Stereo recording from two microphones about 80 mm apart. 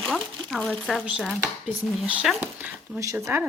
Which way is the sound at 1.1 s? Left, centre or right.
Centre.